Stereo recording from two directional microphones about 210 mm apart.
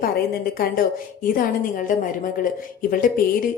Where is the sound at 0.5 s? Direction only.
45° left (ahead or behind).